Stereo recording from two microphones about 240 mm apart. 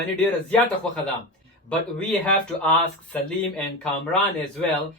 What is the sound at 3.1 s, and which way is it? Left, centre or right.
Speech, centre.